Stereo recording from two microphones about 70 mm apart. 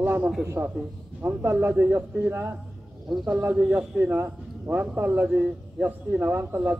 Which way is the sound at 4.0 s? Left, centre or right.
Right.